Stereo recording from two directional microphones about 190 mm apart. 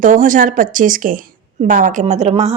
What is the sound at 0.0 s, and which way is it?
Speech, 45° right (ahead or behind).